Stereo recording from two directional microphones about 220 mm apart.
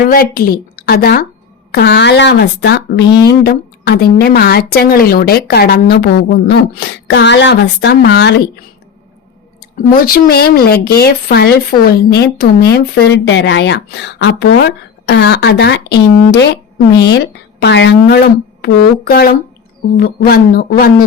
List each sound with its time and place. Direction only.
0.1 s speech: 40° left (ahead or behind)
9.7 s speech: 40° left (ahead or behind)
17.6 s speech: 50° left (ahead or behind)